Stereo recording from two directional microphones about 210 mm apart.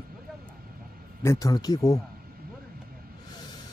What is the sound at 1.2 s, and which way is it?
Speech, 15° left (ahead or behind).